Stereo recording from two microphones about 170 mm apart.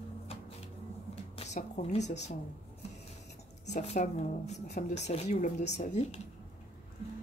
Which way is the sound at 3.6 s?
40° left (ahead or behind).